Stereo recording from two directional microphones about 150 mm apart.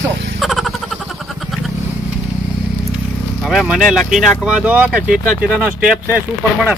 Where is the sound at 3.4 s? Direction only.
5° right (ahead or behind).